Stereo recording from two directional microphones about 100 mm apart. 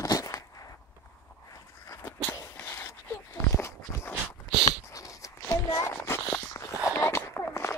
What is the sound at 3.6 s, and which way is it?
Walk, 25° left (ahead or behind).